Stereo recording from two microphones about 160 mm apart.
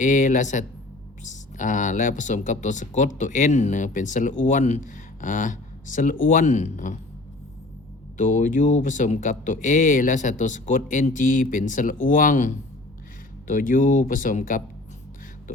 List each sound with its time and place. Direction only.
0.0 s speech: 55° left (ahead or behind)
8.2 s speech: 55° left (ahead or behind)